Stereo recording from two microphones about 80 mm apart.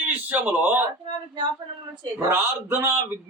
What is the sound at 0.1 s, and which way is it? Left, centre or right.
Speech, right.